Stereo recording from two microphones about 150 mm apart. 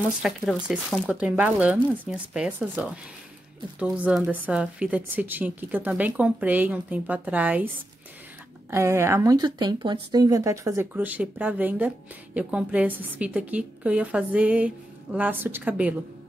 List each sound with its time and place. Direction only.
0.2 s a woman's voice: centre (ahead or behind)